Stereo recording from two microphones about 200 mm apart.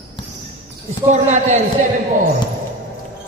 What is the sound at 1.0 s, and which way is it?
Speech, 35° right (ahead or behind).